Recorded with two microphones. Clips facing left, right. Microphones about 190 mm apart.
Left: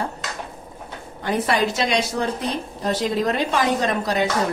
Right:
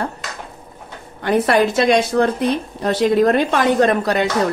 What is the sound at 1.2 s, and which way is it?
Speech, 60° right (ahead or behind).